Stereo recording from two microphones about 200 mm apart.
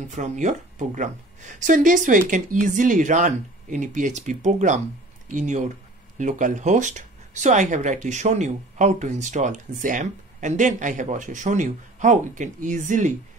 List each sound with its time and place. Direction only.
0.1 s speech: 35° right (ahead or behind)